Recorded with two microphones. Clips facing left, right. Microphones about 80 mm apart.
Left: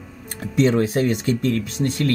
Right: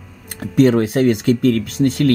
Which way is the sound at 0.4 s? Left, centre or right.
Right.